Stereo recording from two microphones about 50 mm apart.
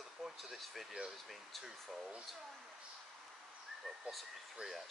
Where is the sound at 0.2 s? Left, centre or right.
Centre.